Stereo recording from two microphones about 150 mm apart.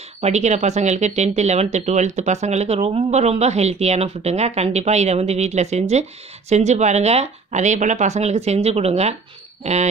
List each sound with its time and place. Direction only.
0.2 s speech: 50° right (ahead or behind)